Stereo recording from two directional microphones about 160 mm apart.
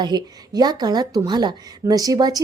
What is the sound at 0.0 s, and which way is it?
A woman's voice, 25° right (ahead or behind).